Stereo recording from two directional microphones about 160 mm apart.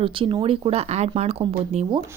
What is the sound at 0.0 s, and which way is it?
Speech, 35° right (ahead or behind).